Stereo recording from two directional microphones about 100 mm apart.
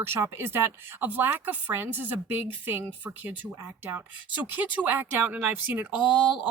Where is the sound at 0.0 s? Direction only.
25° right (ahead or behind).